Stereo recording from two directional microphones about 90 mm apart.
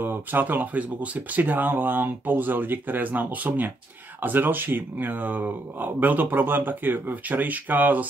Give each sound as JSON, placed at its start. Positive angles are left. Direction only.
{"t": 0.0, "sound": "speech", "side_deg": -20}